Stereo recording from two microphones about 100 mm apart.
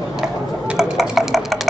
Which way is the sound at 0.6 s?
5° right (ahead or behind).